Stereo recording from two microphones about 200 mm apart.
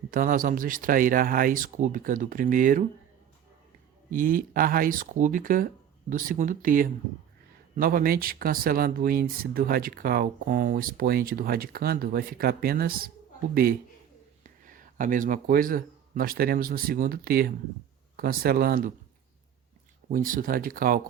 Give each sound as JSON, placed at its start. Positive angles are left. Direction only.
{"t": 0.1, "sound": "speech", "side_deg": -45}
{"t": 4.1, "sound": "a man's voice", "side_deg": -45}
{"t": 20.1, "sound": "speech", "side_deg": -40}